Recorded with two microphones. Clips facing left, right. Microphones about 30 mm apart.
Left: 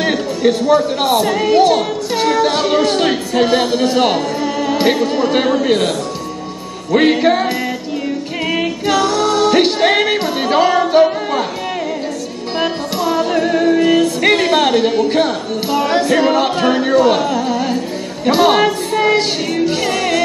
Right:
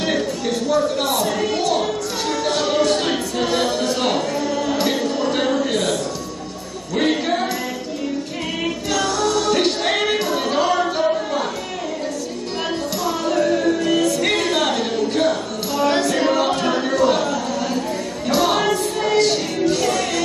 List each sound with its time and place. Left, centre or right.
0.4 s speech: left
8.5 s music: left
13.0 s music: left
16.2 s a sound: left